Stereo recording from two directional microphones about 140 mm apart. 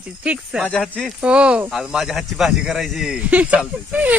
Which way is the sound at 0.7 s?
5° left (ahead or behind).